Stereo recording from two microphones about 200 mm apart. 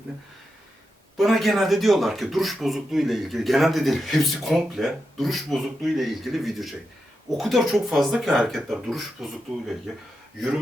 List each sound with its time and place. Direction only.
1.1 s speech: centre (ahead or behind)